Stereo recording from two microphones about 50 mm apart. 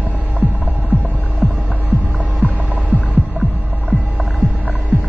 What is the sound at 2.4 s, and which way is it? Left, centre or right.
Music, right.